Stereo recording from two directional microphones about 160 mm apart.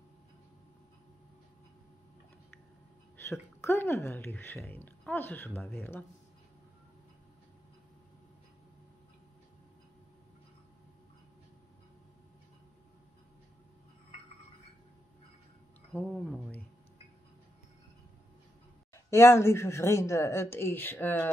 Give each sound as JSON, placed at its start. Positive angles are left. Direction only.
{"t": 3.3, "sound": "a woman's voice", "side_deg": 15}
{"t": 15.9, "sound": "a woman's voice", "side_deg": 5}
{"t": 19.0, "sound": "a woman's voice", "side_deg": 15}